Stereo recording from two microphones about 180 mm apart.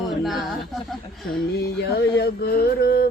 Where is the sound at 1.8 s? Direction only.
60° left (ahead or behind).